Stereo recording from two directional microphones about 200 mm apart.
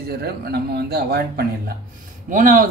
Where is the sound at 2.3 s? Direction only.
40° right (ahead or behind).